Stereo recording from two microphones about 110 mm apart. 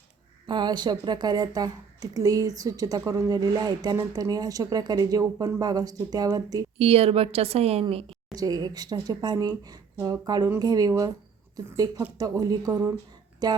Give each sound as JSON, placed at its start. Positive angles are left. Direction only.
{"t": 0.4, "sound": "a woman's voice", "side_deg": -45}
{"t": 6.7, "sound": "a woman's voice", "side_deg": -60}
{"t": 8.4, "sound": "a woman's voice", "side_deg": -35}
{"t": 12.2, "sound": "a woman's voice", "side_deg": -35}